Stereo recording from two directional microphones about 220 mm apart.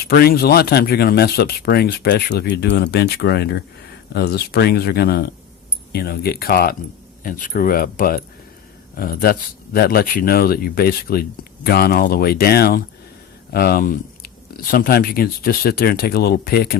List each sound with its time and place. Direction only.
0.0 s speech: 45° left (ahead or behind)